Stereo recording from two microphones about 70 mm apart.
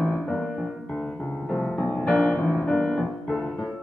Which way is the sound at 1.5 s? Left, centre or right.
Centre.